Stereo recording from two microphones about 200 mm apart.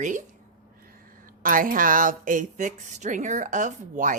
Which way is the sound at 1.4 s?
45° right (ahead or behind).